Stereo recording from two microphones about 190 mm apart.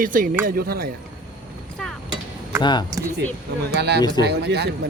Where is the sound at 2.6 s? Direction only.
25° left (ahead or behind).